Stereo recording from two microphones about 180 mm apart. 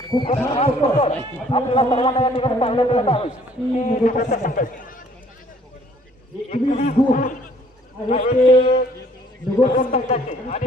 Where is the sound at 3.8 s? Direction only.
45° left (ahead or behind).